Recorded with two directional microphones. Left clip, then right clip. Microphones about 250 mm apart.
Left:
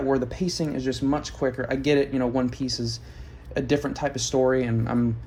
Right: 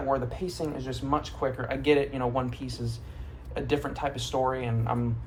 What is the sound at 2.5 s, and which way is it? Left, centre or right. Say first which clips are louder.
A man's voice: left 9 dB; left.